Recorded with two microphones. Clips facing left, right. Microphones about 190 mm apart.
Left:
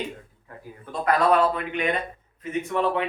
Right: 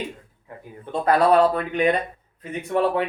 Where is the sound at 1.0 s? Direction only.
35° right (ahead or behind).